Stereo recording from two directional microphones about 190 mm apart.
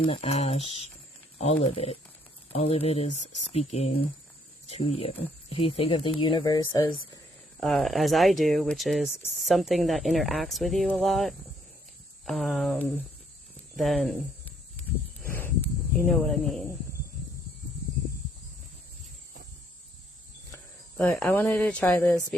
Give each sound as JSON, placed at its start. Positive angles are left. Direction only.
{"t": 0.0, "sound": "speech", "side_deg": 30}
{"t": 7.6, "sound": "speech", "side_deg": 0}
{"t": 15.3, "sound": "snake", "side_deg": 10}
{"t": 21.0, "sound": "speech", "side_deg": 10}